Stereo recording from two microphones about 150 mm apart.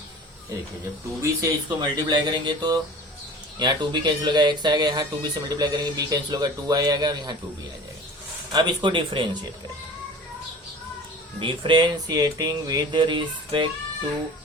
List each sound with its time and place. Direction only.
1.2 s speech: 25° right (ahead or behind)
8.5 s speech: 30° right (ahead or behind)
11.3 s speech: 35° right (ahead or behind)